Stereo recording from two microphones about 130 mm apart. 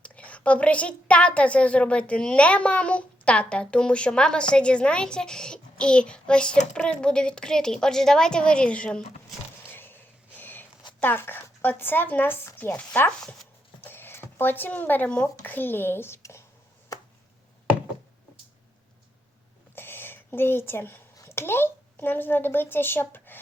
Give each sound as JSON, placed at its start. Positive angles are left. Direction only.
{"t": 0.0, "sound": "a woman's voice", "side_deg": 10}
{"t": 9.6, "sound": "a sound", "side_deg": 15}
{"t": 11.0, "sound": "a woman's voice", "side_deg": 15}
{"t": 13.8, "sound": "speech", "side_deg": 15}
{"t": 19.7, "sound": "speech", "side_deg": 15}